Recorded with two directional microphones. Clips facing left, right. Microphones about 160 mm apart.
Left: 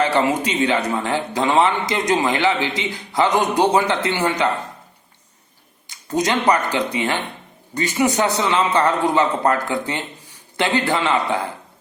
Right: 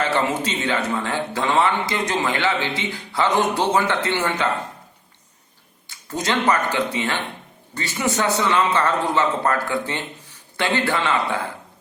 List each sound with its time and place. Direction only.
0.0 s a man's voice: 15° left (ahead or behind)
5.9 s a man's voice: 15° left (ahead or behind)